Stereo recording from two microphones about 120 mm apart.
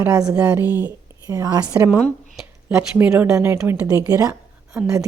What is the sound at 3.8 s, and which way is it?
Speech, 30° right (ahead or behind).